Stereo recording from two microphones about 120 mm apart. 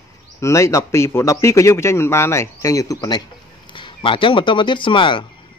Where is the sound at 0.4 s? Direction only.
25° left (ahead or behind).